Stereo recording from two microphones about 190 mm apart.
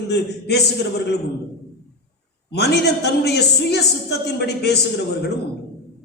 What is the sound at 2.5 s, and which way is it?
Speech, 60° left (ahead or behind).